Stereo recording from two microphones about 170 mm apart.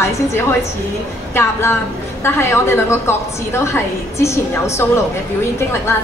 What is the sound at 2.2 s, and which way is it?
A woman's voice, 15° left (ahead or behind).